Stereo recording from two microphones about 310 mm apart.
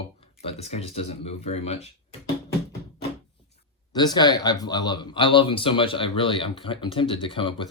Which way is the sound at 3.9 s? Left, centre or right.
Centre.